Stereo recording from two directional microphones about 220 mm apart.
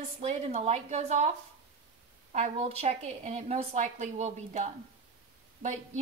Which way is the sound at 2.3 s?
30° right (ahead or behind).